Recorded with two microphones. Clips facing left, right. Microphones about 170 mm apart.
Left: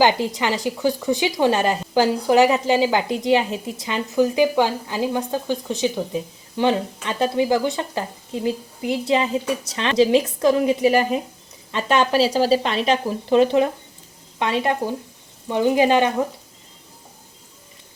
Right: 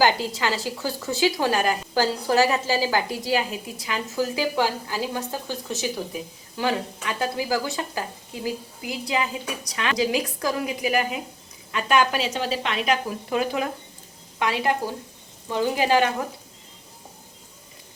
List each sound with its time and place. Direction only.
0.0 s speech: 20° left (ahead or behind)